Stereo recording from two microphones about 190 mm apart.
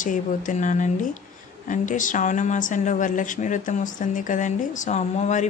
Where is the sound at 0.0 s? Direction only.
45° left (ahead or behind).